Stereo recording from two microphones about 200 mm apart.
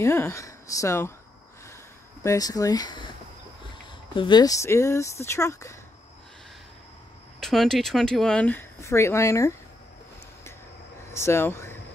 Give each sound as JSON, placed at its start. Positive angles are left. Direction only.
{"t": 0.0, "sound": "speech", "side_deg": 15}
{"t": 2.2, "sound": "speech", "side_deg": 20}
{"t": 4.1, "sound": "speech", "side_deg": 25}
{"t": 7.3, "sound": "speech", "side_deg": 0}
{"t": 11.1, "sound": "speech", "side_deg": 15}